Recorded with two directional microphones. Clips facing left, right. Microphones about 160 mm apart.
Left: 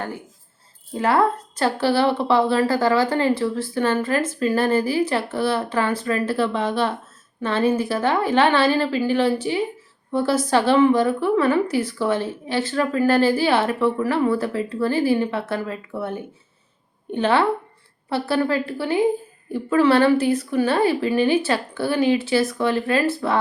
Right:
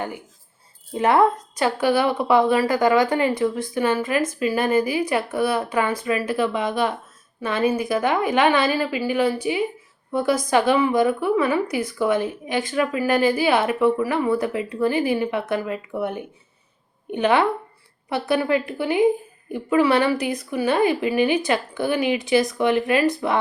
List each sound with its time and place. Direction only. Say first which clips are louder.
0.9 s a woman's voice: right 2 dB; 20° right (ahead or behind)